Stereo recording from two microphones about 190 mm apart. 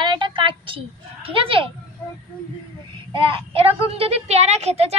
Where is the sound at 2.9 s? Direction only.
25° right (ahead or behind).